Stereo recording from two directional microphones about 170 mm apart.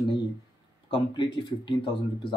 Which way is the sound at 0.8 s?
30° left (ahead or behind).